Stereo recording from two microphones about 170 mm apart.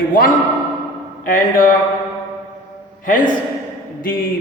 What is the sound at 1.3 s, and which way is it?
Speech, 55° left (ahead or behind).